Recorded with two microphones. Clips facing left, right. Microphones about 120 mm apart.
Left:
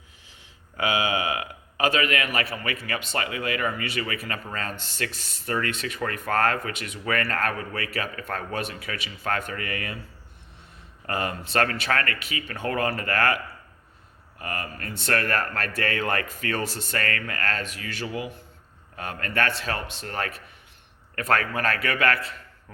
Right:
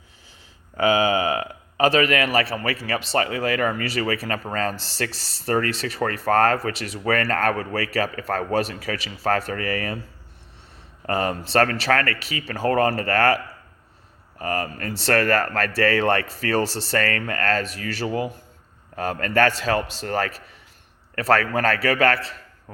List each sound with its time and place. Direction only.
0.8 s speech: 35° right (ahead or behind)
11.0 s speech: 35° right (ahead or behind)